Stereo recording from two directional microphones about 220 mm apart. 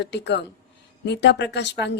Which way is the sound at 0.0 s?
50° left (ahead or behind).